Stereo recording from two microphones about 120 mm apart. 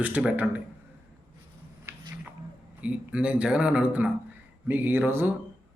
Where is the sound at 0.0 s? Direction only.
10° right (ahead or behind).